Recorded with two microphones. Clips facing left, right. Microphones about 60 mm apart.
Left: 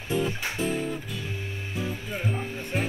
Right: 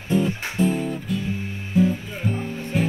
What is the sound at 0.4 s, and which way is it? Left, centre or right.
Guitar, right.